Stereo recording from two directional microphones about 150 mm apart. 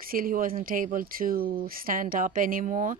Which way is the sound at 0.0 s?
75° right (ahead or behind).